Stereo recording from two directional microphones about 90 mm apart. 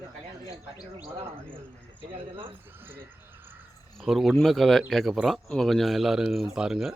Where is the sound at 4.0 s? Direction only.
Centre (ahead or behind).